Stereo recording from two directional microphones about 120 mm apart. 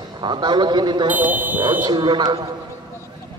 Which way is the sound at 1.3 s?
15° right (ahead or behind).